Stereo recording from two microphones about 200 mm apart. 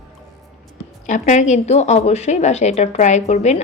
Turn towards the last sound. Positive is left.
turn(degrees=35)  # may be behind; listen again after turning